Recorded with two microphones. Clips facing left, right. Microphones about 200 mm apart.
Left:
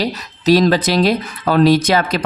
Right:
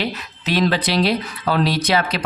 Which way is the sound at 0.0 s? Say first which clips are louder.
Left 7 dB; 40° left (ahead or behind).